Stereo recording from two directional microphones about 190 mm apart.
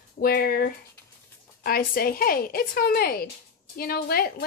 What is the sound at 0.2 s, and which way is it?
A woman's voice, 50° left (ahead or behind).